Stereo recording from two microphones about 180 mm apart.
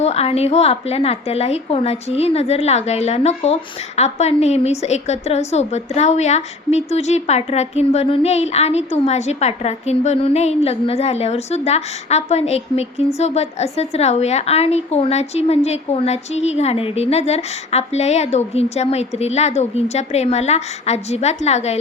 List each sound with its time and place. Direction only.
0.0 s a woman's voice: 35° left (ahead or behind)